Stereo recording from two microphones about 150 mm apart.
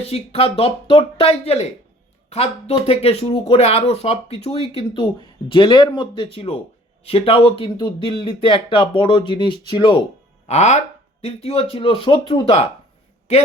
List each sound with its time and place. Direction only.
0.0 s speech: 45° left (ahead or behind)
10.5 s speech: 50° left (ahead or behind)